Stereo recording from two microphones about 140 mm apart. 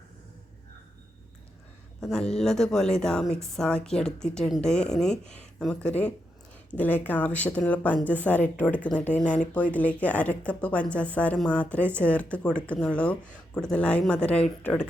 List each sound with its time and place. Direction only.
2.0 s a woman's voice: 5° left (ahead or behind)
5.2 s speech: 55° left (ahead or behind)
5.5 s speech: 5° left (ahead or behind)